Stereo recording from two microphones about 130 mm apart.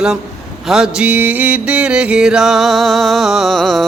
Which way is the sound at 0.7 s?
5° right (ahead or behind).